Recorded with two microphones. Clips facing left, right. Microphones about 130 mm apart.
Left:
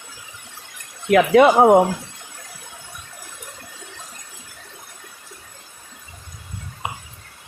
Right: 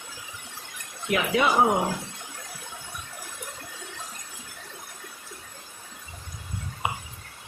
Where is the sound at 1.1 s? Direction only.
65° left (ahead or behind).